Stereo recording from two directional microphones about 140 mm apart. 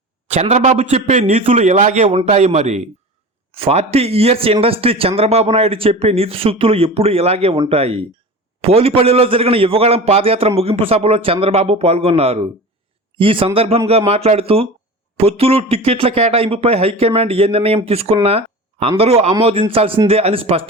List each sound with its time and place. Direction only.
0.3 s a man's voice: 50° right (ahead or behind)